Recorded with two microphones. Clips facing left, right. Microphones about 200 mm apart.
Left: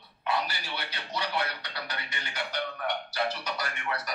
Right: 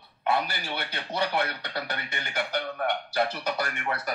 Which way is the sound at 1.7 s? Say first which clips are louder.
Right 5 dB; 50° right (ahead or behind).